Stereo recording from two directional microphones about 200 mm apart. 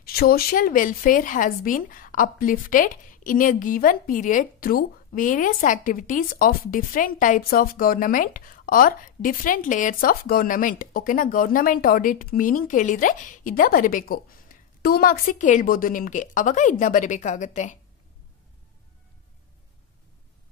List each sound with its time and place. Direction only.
0.0 s a woman's voice: 50° left (ahead or behind)